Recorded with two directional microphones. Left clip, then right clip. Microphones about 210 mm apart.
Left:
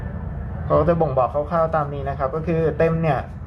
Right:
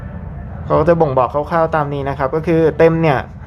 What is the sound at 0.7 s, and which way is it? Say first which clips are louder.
A man's voice: right 5 dB; 25° right (ahead or behind).